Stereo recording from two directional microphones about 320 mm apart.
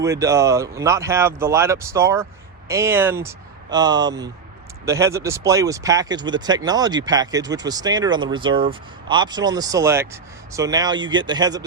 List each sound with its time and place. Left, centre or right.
0.0 s speech: centre